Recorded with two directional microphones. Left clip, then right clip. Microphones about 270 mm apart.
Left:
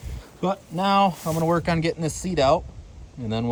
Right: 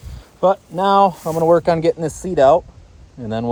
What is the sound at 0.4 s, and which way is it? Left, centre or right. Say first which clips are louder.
Speech: right 10 dB; left.